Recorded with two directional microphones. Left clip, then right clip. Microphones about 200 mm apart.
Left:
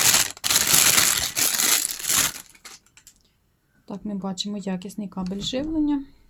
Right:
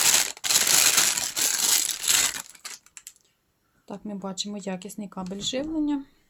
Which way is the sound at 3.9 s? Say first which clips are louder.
Left 3 dB; centre (ahead or behind).